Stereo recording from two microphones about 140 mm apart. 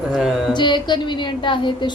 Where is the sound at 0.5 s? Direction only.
35° left (ahead or behind).